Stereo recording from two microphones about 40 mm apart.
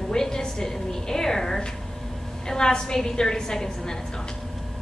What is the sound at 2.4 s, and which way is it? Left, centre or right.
A woman's voice, centre.